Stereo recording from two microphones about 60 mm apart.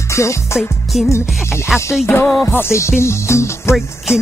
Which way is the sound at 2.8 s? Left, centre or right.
Left.